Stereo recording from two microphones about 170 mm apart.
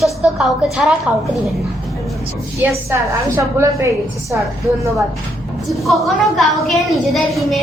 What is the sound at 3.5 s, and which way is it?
Speech, 15° right (ahead or behind).